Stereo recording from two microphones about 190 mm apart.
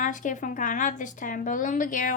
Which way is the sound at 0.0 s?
45° left (ahead or behind).